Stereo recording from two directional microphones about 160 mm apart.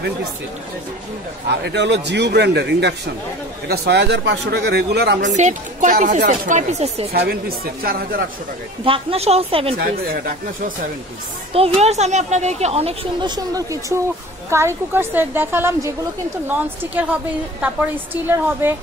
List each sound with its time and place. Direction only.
1.5 s speech: 90° right
5.2 s speech: 50° right (ahead or behind)
7.1 s speech: 75° right (ahead or behind)
8.8 s a woman's voice: 35° right (ahead or behind)
9.8 s speech: 70° right (ahead or behind); by 10.9 s 55° right (ahead or behind)
11.5 s speech: 40° right (ahead or behind)
13.2 s a woman's voice: 25° right (ahead or behind)